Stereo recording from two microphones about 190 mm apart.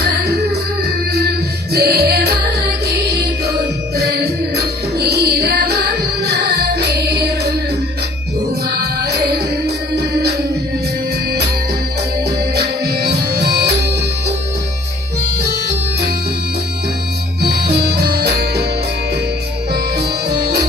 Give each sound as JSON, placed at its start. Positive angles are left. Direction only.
{"t": 0.0, "sound": "music", "side_deg": -55}
{"t": 1.7, "sound": "music", "side_deg": -60}
{"t": 8.8, "sound": "music", "side_deg": -60}
{"t": 12.5, "sound": "music", "side_deg": -55}
{"t": 15.4, "sound": "music", "side_deg": -60}
{"t": 17.4, "sound": "music", "side_deg": -60}
{"t": 19.7, "sound": "music", "side_deg": -60}